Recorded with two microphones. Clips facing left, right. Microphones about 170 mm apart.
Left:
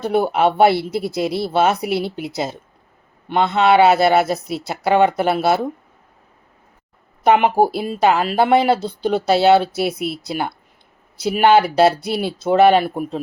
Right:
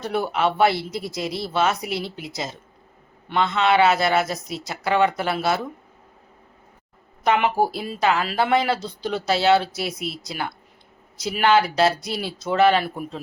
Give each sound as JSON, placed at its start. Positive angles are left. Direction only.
{"t": 0.0, "sound": "speech", "side_deg": 55}
{"t": 7.3, "sound": "speech", "side_deg": 55}